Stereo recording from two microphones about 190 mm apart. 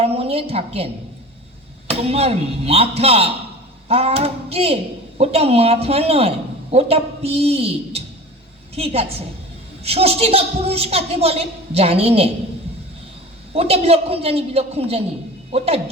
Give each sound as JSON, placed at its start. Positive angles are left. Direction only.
{"t": 0.0, "sound": "a sound", "side_deg": -30}
{"t": 1.9, "sound": "a woman's voice", "side_deg": -30}
{"t": 13.5, "sound": "a woman's voice", "side_deg": -30}